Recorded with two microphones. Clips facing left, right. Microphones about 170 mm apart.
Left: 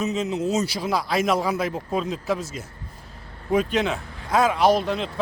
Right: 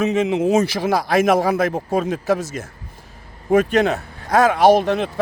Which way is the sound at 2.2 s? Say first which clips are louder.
Right 6 dB; 85° right.